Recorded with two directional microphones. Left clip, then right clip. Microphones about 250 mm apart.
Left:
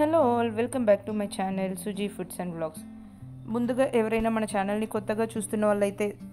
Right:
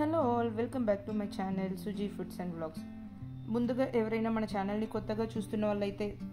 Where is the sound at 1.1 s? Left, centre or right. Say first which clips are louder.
Left 7 dB; left.